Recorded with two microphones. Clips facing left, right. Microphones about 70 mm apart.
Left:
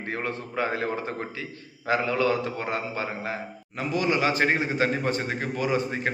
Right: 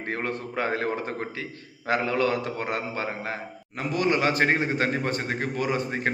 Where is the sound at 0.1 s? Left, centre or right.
Right.